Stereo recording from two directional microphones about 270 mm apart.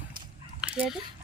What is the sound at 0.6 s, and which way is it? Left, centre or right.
Dog, centre.